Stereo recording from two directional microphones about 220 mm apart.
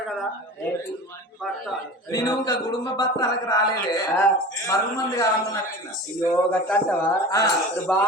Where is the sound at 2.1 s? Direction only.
15° left (ahead or behind).